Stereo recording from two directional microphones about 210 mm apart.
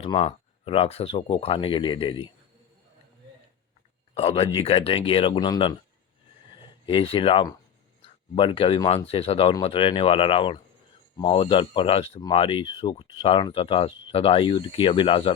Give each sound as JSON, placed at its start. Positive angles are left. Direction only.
{"t": 0.0, "sound": "speech", "side_deg": 30}
{"t": 4.1, "sound": "speech", "side_deg": 30}